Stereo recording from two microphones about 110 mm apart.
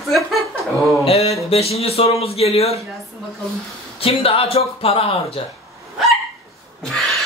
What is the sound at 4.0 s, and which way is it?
Speech, 60° left (ahead or behind).